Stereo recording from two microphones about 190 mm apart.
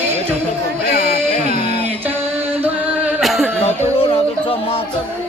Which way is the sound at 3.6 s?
30° left (ahead or behind).